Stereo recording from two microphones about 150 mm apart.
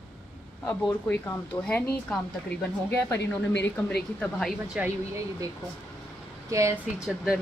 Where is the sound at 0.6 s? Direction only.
10° left (ahead or behind).